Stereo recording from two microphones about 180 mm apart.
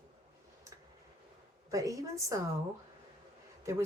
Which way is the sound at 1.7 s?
20° right (ahead or behind).